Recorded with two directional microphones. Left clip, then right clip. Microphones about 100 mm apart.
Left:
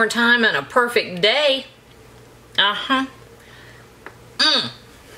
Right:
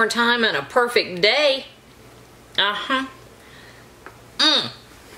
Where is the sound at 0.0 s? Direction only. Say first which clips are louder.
Left 2 dB; 5° right (ahead or behind).